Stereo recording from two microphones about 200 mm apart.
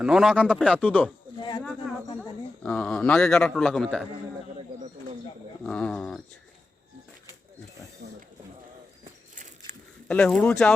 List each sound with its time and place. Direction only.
0.0 s a man's voice: centre (ahead or behind)
0.8 s speech: 10° left (ahead or behind)
1.4 s a sound: 20° left (ahead or behind)
2.6 s a man's voice: 5° left (ahead or behind)
5.6 s bird: 5° left (ahead or behind)
9.3 s a sound: 40° right (ahead or behind)
10.1 s speech: 5° left (ahead or behind)